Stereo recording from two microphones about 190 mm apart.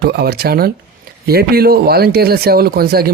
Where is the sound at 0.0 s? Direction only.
60° right (ahead or behind).